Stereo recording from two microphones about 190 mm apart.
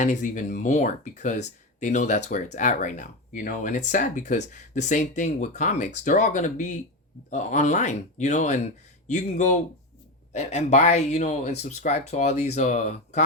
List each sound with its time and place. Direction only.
0.0 s speech: 40° left (ahead or behind)